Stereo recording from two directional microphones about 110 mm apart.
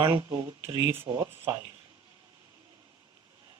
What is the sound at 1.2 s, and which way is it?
Speech, 30° right (ahead or behind).